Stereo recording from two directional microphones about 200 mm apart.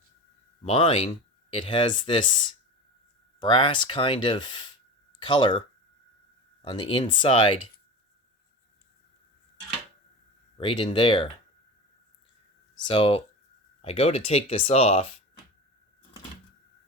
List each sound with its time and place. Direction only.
0.6 s speech: 30° left (ahead or behind)
10.6 s speech: 25° left (ahead or behind)
12.9 s speech: 25° left (ahead or behind)